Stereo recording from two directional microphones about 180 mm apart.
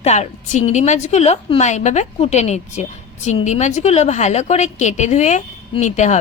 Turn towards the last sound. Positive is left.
turn(degrees=40)  # may be behind; listen again after turning